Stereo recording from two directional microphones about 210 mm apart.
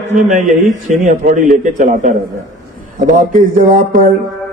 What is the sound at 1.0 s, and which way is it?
A man's voice, 35° right (ahead or behind).